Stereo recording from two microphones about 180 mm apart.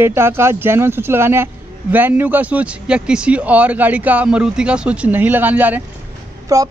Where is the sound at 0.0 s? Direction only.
15° right (ahead or behind).